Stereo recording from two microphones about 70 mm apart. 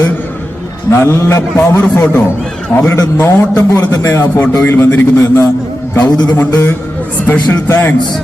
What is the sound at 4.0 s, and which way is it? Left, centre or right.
Speech, left.